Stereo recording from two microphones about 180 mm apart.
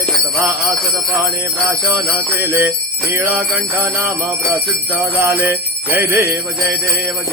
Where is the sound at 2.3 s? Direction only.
15° right (ahead or behind).